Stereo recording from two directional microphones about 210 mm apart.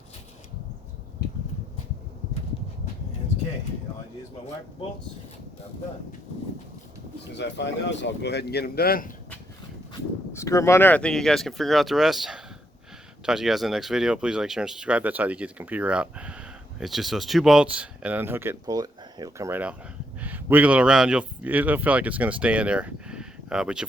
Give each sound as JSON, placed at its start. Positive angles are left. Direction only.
{"t": 7.3, "sound": "speech", "side_deg": 55}
{"t": 10.3, "sound": "speech", "side_deg": 15}